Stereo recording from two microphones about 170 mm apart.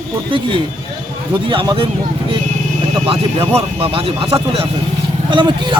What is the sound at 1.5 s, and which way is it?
Speech, 30° right (ahead or behind).